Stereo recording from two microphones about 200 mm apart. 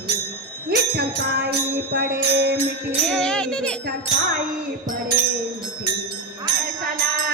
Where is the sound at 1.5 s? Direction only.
50° right (ahead or behind).